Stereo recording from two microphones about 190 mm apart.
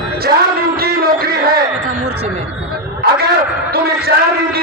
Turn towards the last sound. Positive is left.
turn(degrees=-50)  # may be behind; listen again after turning